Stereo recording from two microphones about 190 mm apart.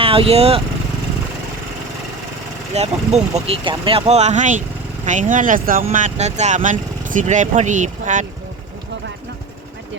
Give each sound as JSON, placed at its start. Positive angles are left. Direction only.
{"t": 0.0, "sound": "speech", "side_deg": -30}
{"t": 2.7, "sound": "speech", "side_deg": -35}